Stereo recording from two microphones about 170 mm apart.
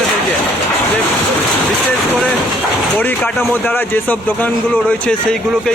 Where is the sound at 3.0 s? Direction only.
10° left (ahead or behind).